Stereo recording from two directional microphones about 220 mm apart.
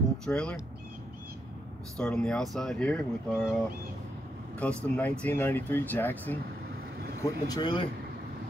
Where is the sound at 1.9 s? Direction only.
5° left (ahead or behind).